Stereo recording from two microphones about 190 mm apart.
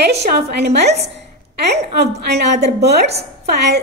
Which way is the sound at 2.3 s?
60° right (ahead or behind).